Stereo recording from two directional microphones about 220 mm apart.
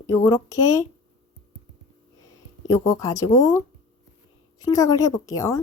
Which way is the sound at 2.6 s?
15° left (ahead or behind).